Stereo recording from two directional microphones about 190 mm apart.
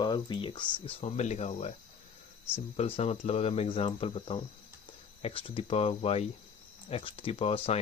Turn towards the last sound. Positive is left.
turn(degrees=30)  # may be behind; listen again after turning